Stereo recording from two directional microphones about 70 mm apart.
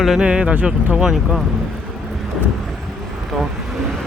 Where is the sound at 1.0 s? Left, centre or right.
Centre.